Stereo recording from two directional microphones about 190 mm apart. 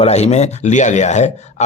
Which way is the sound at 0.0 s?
35° left (ahead or behind).